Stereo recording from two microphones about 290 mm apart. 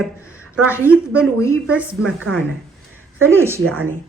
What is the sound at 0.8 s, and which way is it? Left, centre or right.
Speech, centre.